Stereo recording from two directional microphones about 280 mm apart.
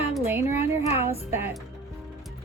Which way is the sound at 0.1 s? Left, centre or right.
Centre.